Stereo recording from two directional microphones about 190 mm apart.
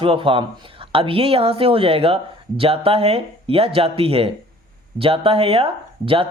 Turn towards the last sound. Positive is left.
turn(degrees=-30)  # may be behind; listen again after turning